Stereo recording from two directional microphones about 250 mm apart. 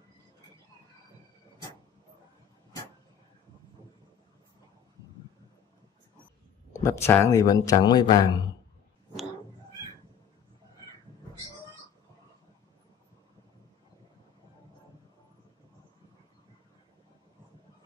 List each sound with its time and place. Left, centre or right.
6.7 s speech: centre